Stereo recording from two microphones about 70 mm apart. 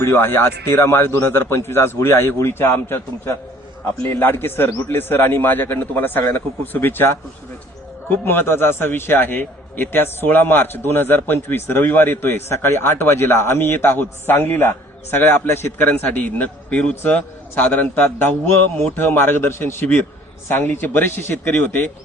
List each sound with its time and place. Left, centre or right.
0.0 s a man's voice: left
15.9 s a man's voice: left
16.9 s a man's voice: left